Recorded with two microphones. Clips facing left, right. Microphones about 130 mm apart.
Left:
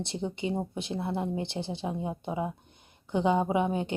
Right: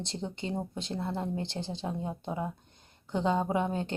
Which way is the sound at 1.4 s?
60° left (ahead or behind).